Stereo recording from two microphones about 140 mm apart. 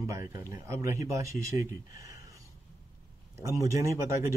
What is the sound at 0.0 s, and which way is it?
Speech, 25° right (ahead or behind).